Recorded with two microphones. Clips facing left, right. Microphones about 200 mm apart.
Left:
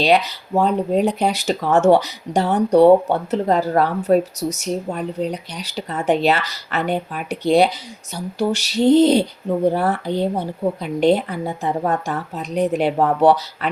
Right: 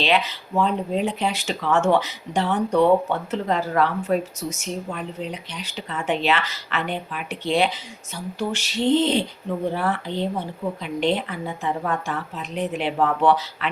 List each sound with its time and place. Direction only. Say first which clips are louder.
0.0 s speech: left 5 dB; 40° left (ahead or behind)